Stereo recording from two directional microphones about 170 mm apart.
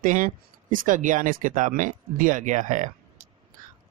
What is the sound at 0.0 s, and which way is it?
Speech, 50° right (ahead or behind).